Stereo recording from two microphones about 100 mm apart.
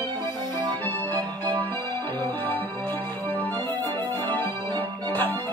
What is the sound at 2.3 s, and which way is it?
Music, 20° left (ahead or behind).